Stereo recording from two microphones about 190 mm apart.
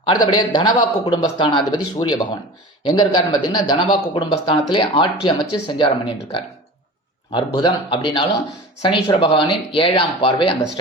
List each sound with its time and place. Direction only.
0.1 s a man's voice: 20° left (ahead or behind)
7.3 s a man's voice: 25° left (ahead or behind)